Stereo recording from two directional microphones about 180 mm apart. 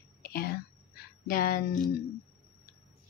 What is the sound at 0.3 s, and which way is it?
Whispering, 55° left (ahead or behind).